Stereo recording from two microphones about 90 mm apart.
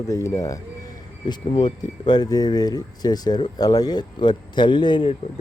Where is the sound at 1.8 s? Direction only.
50° left (ahead or behind).